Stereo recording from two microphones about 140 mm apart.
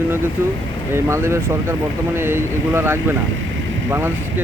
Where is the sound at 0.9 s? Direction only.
20° right (ahead or behind).